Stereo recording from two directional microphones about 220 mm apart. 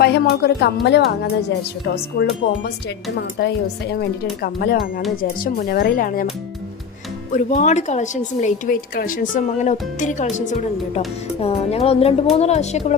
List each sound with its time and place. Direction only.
0.0 s speech: 45° left (ahead or behind)
3.4 s speech: 50° left (ahead or behind)
7.3 s speech: 35° left (ahead or behind)